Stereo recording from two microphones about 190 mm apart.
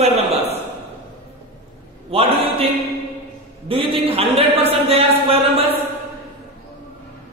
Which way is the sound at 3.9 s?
30° right (ahead or behind).